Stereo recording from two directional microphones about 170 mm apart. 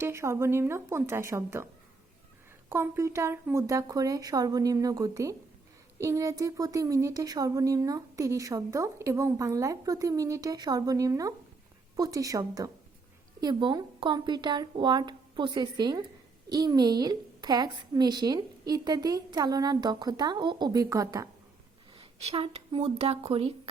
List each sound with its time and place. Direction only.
0.0 s a woman's voice: 15° right (ahead or behind)
2.6 s a woman's voice: 15° right (ahead or behind)
21.9 s speech: 35° right (ahead or behind)